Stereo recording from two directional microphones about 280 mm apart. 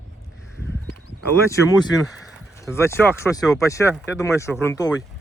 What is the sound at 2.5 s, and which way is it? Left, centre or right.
Speech, centre.